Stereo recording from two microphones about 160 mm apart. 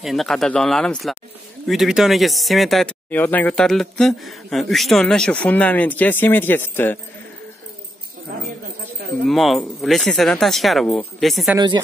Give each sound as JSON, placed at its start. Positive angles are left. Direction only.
{"t": 0.0, "sound": "speech", "side_deg": 0}
{"t": 9.2, "sound": "speech", "side_deg": 0}
{"t": 11.5, "sound": "speech", "side_deg": -25}